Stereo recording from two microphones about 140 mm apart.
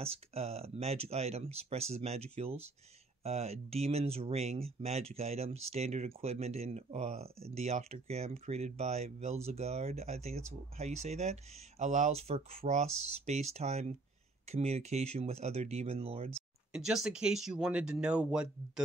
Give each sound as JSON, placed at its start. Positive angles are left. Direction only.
{"t": 0.0, "sound": "speech", "side_deg": -45}
{"t": 16.7, "sound": "speech", "side_deg": -5}